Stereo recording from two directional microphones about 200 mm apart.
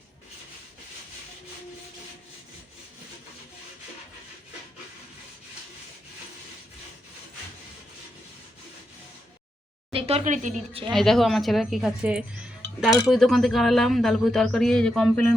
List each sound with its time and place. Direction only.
9.9 s speech: 30° right (ahead or behind)
10.9 s speech: centre (ahead or behind)